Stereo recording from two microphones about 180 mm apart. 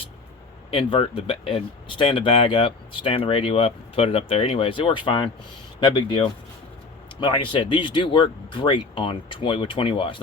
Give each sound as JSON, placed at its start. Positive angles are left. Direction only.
{"t": 0.7, "sound": "speech", "side_deg": 30}